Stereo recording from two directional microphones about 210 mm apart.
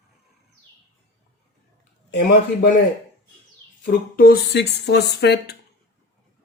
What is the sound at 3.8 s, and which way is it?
Speech, 45° left (ahead or behind).